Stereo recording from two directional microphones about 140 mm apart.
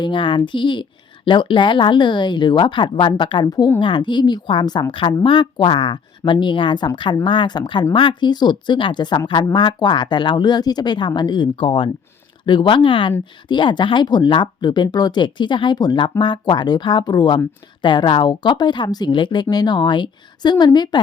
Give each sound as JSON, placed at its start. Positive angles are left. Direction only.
{"t": 0.0, "sound": "speech", "side_deg": 35}